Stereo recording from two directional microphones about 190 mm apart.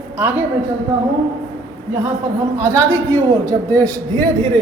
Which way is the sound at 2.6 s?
15° right (ahead or behind).